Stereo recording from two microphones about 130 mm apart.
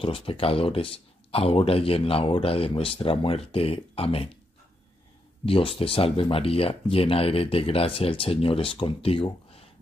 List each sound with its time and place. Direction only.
0.0 s speech: 45° left (ahead or behind)
5.4 s speech: 45° left (ahead or behind)